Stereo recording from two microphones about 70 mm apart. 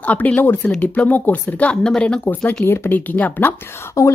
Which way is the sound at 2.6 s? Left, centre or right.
Left.